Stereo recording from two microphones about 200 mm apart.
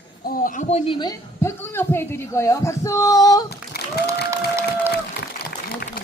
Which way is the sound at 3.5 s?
50° left (ahead or behind).